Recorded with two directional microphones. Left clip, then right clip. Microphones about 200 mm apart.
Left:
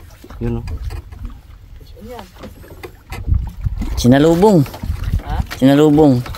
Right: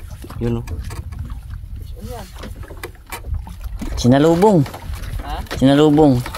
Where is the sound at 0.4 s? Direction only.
50° right (ahead or behind).